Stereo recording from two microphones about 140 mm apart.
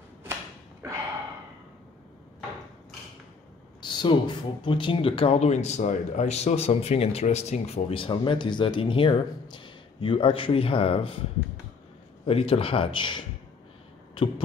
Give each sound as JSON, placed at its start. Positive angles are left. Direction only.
{"t": 0.8, "sound": "gasp", "side_deg": -20}
{"t": 3.8, "sound": "speech", "side_deg": 35}
{"t": 12.3, "sound": "speech", "side_deg": 45}